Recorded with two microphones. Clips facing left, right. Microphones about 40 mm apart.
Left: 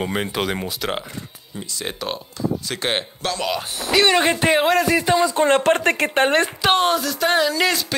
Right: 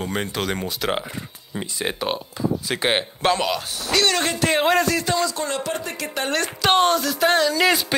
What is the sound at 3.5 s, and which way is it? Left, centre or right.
Speech, left.